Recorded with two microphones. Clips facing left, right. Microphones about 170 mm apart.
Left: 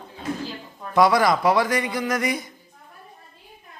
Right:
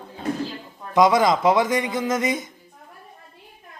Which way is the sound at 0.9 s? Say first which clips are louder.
Right 1 dB; 20° right (ahead or behind).